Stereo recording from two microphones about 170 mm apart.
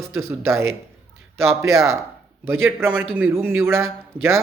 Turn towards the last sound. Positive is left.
turn(degrees=-15)  # may be behind; listen again after turning